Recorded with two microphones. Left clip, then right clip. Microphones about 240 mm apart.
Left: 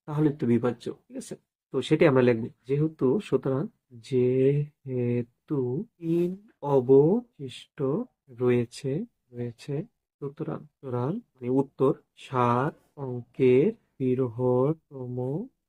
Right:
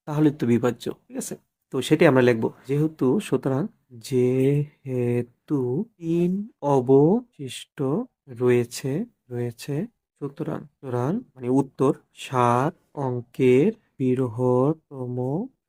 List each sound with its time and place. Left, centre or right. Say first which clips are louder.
0.0 s speech: right 4 dB; right